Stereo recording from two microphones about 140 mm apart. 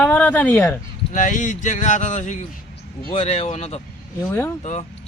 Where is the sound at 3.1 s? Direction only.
50° left (ahead or behind).